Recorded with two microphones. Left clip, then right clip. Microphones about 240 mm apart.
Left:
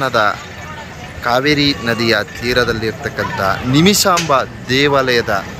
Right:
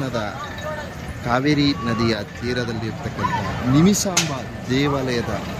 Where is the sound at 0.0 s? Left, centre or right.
Centre.